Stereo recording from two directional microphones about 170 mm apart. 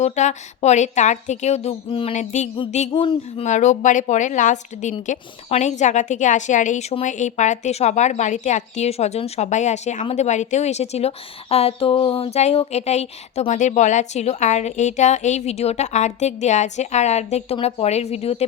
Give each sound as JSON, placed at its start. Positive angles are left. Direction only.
{"t": 0.0, "sound": "a woman's voice", "side_deg": 40}
{"t": 2.9, "sound": "speech", "side_deg": 30}
{"t": 3.4, "sound": "a woman's voice", "side_deg": 45}